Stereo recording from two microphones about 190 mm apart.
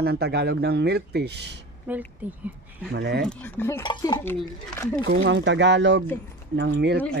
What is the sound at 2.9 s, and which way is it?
Speech, 55° right (ahead or behind).